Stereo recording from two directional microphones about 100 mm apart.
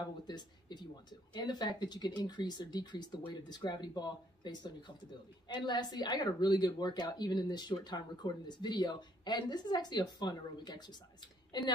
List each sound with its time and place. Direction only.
0.3 s a woman's voice: 45° left (ahead or behind)